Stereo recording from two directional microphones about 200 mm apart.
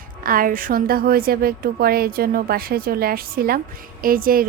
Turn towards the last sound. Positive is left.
turn(degrees=-45)  # may be behind; listen again after turning